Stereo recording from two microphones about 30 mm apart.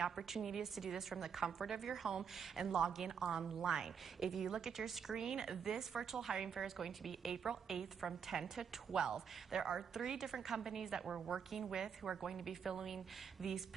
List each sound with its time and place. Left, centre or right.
0.1 s a woman's voice: centre
7.0 s a woman's voice: centre
7.4 s a woman's voice: centre
12.2 s a woman's voice: centre